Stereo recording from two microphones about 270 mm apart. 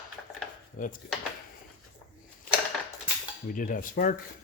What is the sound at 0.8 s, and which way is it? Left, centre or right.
Cutlery, left.